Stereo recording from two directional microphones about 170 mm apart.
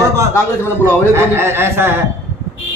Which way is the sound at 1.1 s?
15° right (ahead or behind).